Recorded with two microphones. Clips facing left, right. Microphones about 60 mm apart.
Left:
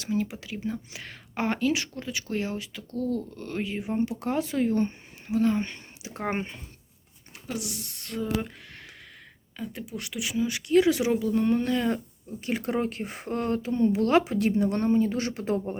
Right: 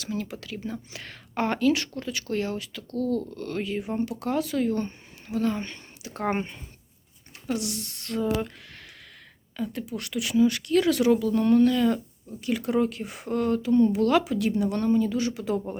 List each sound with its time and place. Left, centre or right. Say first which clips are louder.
0.1 s speech: left 3 dB; centre
6.2 s speech: right 3 dB; centre; by 15.6 s left